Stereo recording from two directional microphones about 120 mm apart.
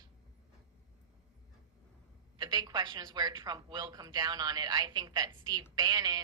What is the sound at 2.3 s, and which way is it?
A woman's voice, 35° right (ahead or behind).